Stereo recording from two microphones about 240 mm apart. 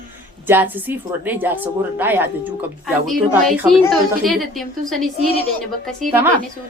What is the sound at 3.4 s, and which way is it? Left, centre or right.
A woman's voice, centre.